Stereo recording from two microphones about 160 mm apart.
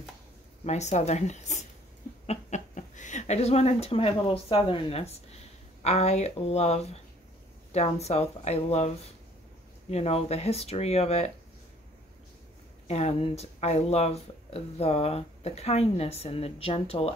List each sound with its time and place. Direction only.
0.7 s speech: 45° left (ahead or behind)
12.8 s speech: 40° left (ahead or behind)